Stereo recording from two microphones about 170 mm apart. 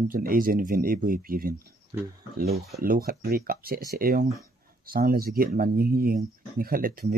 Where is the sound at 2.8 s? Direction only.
60° right (ahead or behind).